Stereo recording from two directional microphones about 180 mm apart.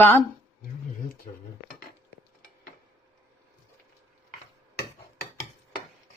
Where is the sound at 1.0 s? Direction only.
55° left (ahead or behind).